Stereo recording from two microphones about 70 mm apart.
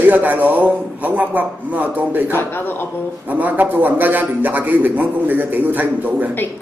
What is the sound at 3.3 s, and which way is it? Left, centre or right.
Speech, right.